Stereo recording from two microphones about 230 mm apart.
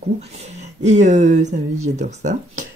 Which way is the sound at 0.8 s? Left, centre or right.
Right.